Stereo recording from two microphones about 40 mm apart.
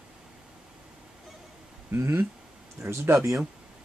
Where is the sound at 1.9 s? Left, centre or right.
Right.